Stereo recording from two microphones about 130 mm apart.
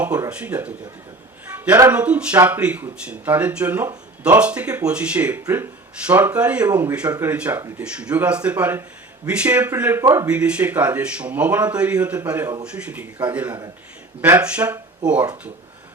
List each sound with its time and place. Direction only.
0.0 s speech: 10° right (ahead or behind)
1.5 s a sound: 15° right (ahead or behind)
1.9 s speech: 10° right (ahead or behind)
10.0 s speech: 25° right (ahead or behind)
10.2 s speech: 10° right (ahead or behind)